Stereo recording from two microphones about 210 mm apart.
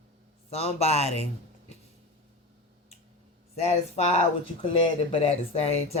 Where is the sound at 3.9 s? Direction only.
30° left (ahead or behind).